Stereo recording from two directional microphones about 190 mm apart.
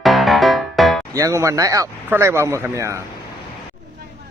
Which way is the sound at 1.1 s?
15° right (ahead or behind).